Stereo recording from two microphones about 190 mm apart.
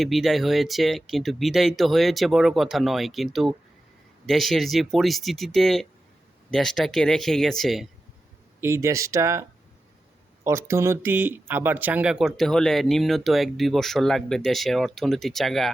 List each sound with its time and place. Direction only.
0.0 s speech: centre (ahead or behind)
8.6 s speech: 15° right (ahead or behind); by 15.7 s centre (ahead or behind)